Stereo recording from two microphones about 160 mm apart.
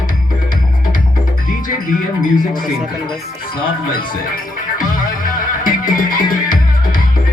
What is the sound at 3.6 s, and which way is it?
Music, 65° left (ahead or behind).